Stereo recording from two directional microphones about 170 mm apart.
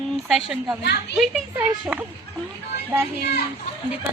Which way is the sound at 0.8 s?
75° left (ahead or behind).